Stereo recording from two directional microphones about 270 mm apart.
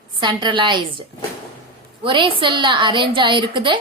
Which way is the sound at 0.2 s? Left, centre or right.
Centre.